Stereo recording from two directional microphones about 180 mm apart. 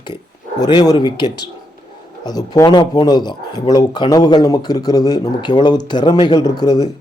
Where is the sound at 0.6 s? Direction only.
20° left (ahead or behind).